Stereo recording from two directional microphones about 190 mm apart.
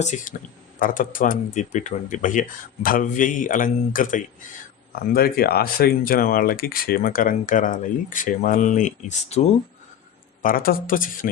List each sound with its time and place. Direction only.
0.0 s speech: 40° left (ahead or behind)
10.4 s speech: 50° left (ahead or behind)